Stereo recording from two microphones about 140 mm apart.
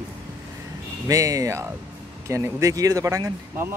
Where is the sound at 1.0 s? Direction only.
25° right (ahead or behind).